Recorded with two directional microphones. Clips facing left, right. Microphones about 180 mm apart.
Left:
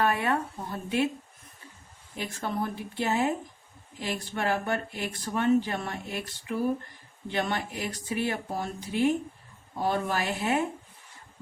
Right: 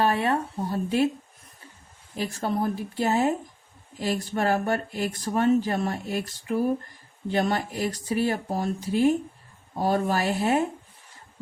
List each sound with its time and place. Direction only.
0.0 s speech: 30° right (ahead or behind)
2.1 s speech: 35° right (ahead or behind)